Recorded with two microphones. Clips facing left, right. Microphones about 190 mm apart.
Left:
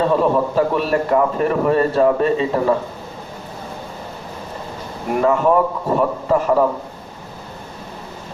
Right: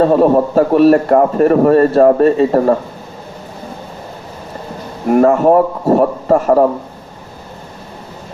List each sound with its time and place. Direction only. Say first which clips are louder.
0.0 s a man's voice: right 6 dB; 45° right (ahead or behind)
5.1 s a man's voice: right 6 dB; 45° right (ahead or behind)